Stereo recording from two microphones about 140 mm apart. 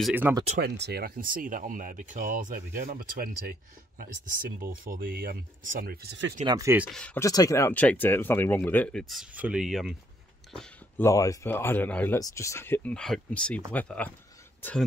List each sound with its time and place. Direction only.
0.1 s speech: 15° right (ahead or behind)
0.9 s speech: 90° right
4.6 s speech: 90° right
6.4 s speech: 25° right (ahead or behind)
6.9 s speech: 5° left (ahead or behind)
7.2 s speech: 25° left (ahead or behind); by 9.9 s centre (ahead or behind)
11.0 s speech: 20° left (ahead or behind)
12.2 s speech: 25° left (ahead or behind)